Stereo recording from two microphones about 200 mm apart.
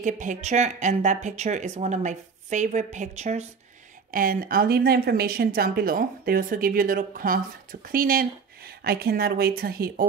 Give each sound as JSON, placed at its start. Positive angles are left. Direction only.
{"t": 0.0, "sound": "speech", "side_deg": -40}